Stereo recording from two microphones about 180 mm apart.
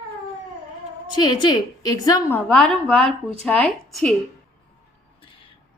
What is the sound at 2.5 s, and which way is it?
A woman's voice, 5° left (ahead or behind).